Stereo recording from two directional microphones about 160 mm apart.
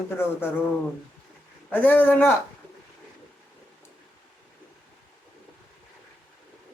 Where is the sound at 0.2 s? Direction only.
15° left (ahead or behind).